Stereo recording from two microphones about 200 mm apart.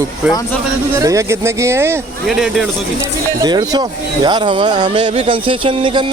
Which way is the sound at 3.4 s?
20° right (ahead or behind).